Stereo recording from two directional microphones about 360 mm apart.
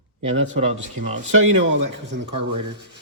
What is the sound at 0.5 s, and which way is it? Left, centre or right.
Speech, centre.